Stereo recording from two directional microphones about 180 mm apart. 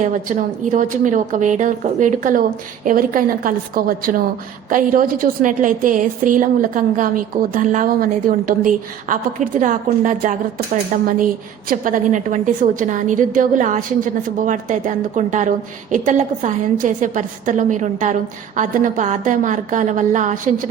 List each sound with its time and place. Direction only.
0.0 s a woman's voice: 45° right (ahead or behind)